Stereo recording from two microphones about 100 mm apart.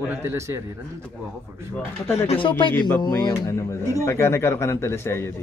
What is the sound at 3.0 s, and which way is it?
Speech, 40° left (ahead or behind).